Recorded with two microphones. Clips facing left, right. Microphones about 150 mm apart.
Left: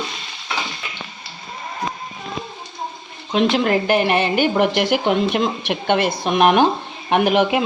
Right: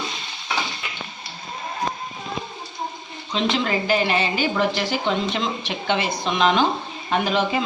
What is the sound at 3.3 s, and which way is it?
A woman's voice, 60° left (ahead or behind).